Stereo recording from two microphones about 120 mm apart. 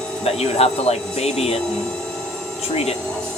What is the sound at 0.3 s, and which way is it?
Speech, 60° left (ahead or behind).